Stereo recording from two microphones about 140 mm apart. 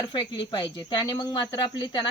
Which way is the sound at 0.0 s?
30° left (ahead or behind).